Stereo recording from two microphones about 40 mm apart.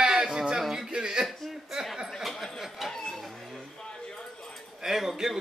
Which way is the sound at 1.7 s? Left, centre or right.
Centre.